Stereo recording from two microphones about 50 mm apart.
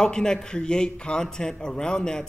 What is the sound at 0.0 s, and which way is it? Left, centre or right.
A man's voice, centre.